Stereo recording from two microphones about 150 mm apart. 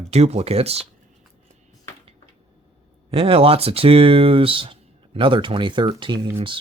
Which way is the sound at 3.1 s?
40° right (ahead or behind).